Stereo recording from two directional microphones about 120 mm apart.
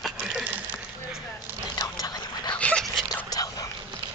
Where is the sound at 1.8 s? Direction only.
30° left (ahead or behind).